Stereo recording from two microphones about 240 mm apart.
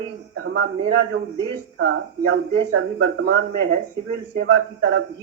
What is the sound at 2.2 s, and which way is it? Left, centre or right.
Speech, right.